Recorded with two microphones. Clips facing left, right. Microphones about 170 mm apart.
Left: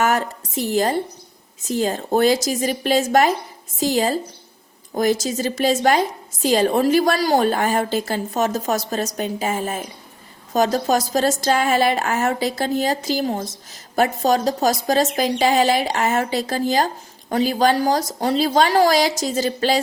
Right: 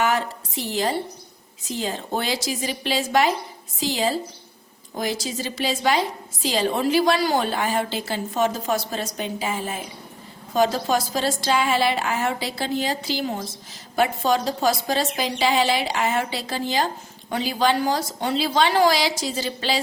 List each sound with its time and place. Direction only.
0.0 s a woman's voice: 45° left (ahead or behind)